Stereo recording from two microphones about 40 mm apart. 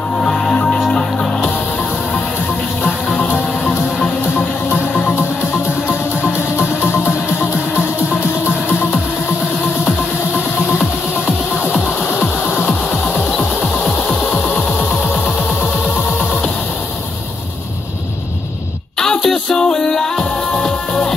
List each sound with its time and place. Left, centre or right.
0.2 s music: left
4.9 s music: left
6.6 s music: left
12.1 s music: left
18.9 s music: centre